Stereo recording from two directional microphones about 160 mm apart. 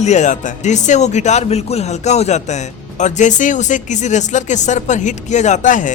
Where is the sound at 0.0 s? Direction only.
45° left (ahead or behind).